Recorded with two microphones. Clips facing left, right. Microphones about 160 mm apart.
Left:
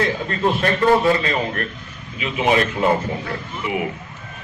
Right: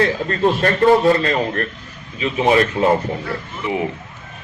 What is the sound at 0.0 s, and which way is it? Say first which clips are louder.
A man's voice: right 3 dB; 40° right (ahead or behind).